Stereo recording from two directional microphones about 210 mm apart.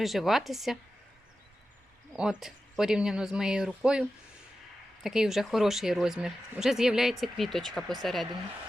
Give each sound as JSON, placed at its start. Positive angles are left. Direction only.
{"t": 0.0, "sound": "speech", "side_deg": 0}
{"t": 2.1, "sound": "speech", "side_deg": -5}